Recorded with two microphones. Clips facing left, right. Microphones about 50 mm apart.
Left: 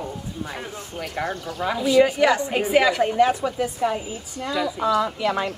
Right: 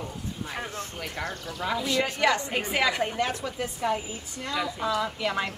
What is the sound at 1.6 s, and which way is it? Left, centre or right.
A woman's voice, centre.